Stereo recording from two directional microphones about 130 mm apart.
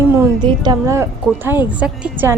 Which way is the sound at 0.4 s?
30° right (ahead or behind).